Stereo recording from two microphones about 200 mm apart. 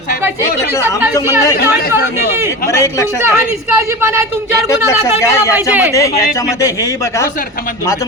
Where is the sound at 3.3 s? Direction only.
15° right (ahead or behind).